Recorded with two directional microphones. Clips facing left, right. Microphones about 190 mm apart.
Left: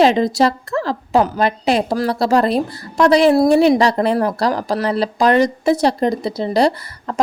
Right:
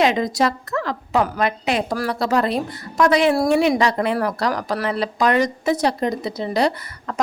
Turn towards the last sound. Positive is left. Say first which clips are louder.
# left 4 dB
turn(degrees=35)  # may be behind; listen again after turning